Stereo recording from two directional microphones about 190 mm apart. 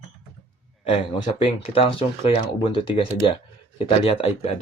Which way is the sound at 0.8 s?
30° left (ahead or behind).